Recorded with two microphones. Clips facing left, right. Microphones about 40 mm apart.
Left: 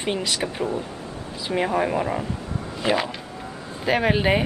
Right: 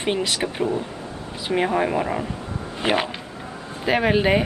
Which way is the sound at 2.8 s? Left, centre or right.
Right.